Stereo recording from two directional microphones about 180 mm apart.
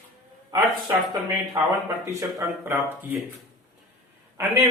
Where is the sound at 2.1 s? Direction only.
15° right (ahead or behind).